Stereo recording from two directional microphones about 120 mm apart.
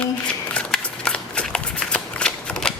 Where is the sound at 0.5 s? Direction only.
10° left (ahead or behind).